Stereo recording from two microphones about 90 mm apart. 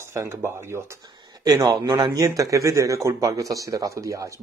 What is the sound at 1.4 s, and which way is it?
Speech, 45° right (ahead or behind).